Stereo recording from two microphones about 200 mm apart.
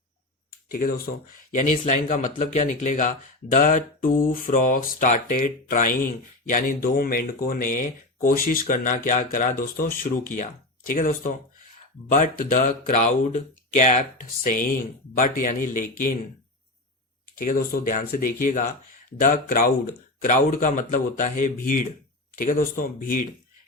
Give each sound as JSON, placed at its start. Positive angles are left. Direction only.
{"t": 0.7, "sound": "speech", "side_deg": 45}
{"t": 17.3, "sound": "speech", "side_deg": 45}